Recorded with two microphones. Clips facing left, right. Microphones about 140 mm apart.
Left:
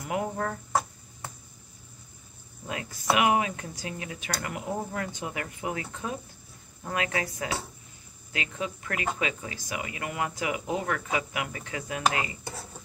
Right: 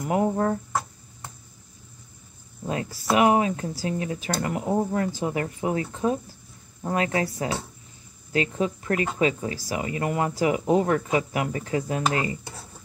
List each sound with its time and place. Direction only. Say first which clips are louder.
0.0 s speech: right 7 dB; 35° right (ahead or behind)
2.6 s speech: right 6 dB; 35° right (ahead or behind)